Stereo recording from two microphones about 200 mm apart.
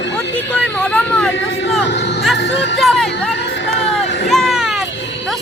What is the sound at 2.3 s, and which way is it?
Music, 60° left (ahead or behind).